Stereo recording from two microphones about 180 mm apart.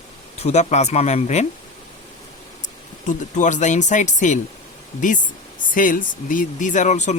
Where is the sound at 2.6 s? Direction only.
45° left (ahead or behind).